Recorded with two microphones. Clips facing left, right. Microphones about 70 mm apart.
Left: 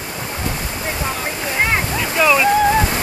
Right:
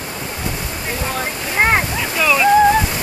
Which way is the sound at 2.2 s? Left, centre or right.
Centre.